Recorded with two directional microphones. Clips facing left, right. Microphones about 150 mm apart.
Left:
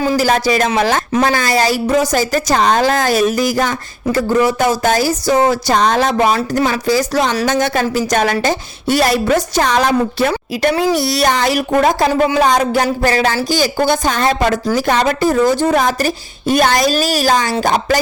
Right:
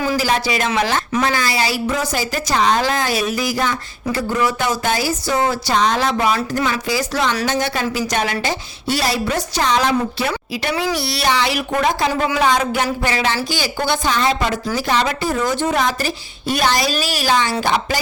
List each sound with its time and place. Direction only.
0.2 s a woman's voice: 45° left (ahead or behind)
6.3 s a woman's voice: 35° left (ahead or behind)